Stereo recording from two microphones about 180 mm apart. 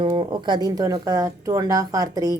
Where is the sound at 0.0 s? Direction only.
25° right (ahead or behind).